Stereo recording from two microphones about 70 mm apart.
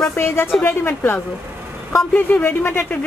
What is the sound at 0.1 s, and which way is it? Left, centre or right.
A woman's voice, left.